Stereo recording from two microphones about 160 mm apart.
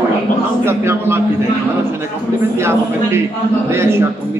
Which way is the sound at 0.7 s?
15° right (ahead or behind).